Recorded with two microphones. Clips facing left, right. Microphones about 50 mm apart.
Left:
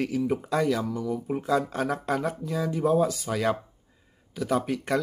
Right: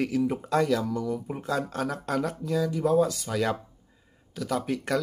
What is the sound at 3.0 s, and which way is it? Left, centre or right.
Speech, centre.